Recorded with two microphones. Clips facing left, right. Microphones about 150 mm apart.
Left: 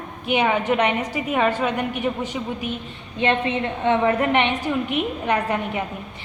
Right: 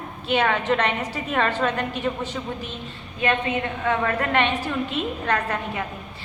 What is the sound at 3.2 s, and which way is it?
A woman's voice, 25° left (ahead or behind).